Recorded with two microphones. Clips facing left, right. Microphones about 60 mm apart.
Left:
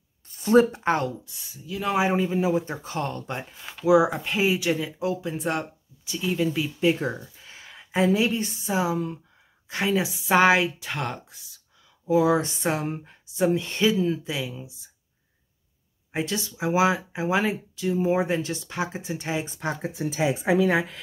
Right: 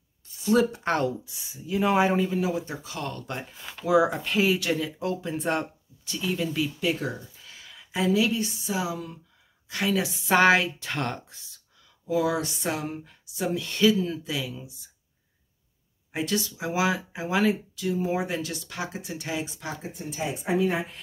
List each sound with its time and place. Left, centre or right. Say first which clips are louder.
0.3 s speech: left 4 dB; left
0.7 s speech: left 2 dB; centre
1.0 s speech: right 2 dB; centre
1.9 s speech: even; centre
2.5 s speech: left 5 dB; left
3.1 s speech: left 2 dB; left
3.3 s speech: left 1 dB; centre; by 9.2 s left
9.7 s speech: left 2 dB; left; by 11.6 s centre
12.1 s speech: left 5 dB; left
16.1 s speech: even; left
19.8 s speech: left 8 dB; left